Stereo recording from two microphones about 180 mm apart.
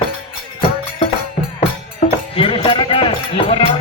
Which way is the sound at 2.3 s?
30° left (ahead or behind).